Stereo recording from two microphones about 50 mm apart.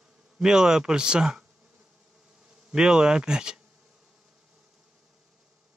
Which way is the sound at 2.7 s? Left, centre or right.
Centre.